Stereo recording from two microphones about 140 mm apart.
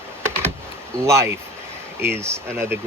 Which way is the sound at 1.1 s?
20° right (ahead or behind).